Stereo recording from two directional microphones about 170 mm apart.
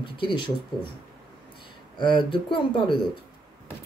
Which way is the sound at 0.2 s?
30° left (ahead or behind).